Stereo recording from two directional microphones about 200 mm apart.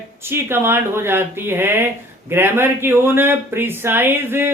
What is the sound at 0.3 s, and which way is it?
Speech, 10° right (ahead or behind).